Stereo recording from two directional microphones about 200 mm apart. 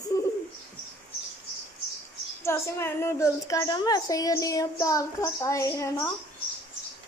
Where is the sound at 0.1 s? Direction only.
15° left (ahead or behind).